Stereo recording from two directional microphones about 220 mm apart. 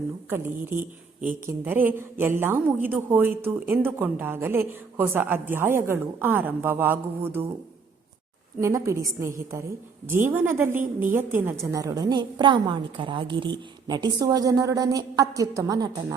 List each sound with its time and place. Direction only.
0.3 s a woman's voice: 10° right (ahead or behind)
8.6 s a woman's voice: 15° right (ahead or behind)